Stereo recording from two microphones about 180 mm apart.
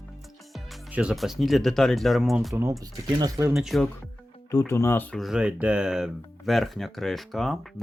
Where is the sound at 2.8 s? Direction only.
20° right (ahead or behind).